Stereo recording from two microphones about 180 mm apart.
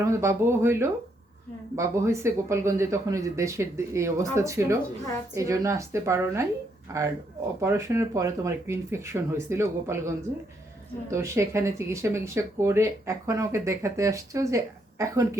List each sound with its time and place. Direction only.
0.0 s speech: 15° right (ahead or behind)
7.6 s speech: 15° right (ahead or behind)